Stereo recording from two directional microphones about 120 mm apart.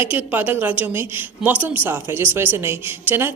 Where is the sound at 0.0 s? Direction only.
15° right (ahead or behind).